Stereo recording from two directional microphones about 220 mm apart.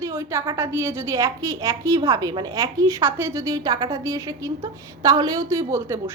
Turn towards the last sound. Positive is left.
turn(degrees=-15)  # may be behind; listen again after turning